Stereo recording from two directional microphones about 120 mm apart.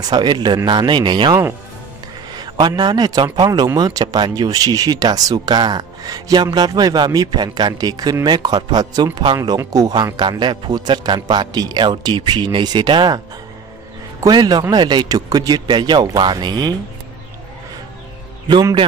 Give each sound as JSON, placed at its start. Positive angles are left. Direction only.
{"t": 0.0, "sound": "a man's voice", "side_deg": -35}
{"t": 2.3, "sound": "a man's voice", "side_deg": -35}
{"t": 14.2, "sound": "a man's voice", "side_deg": -35}
{"t": 18.5, "sound": "a man's voice", "side_deg": -35}